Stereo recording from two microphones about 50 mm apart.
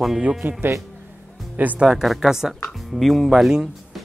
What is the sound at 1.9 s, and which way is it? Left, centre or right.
Speech, centre.